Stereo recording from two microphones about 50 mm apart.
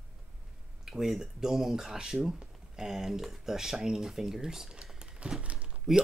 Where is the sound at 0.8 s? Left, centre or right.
Centre.